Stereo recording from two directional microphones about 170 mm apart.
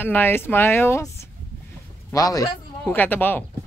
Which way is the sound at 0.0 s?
10° left (ahead or behind).